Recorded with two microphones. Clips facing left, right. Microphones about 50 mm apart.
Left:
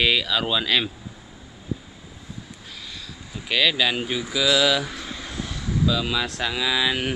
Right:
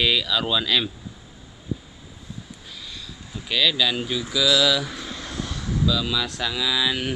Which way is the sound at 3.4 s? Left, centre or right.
Left.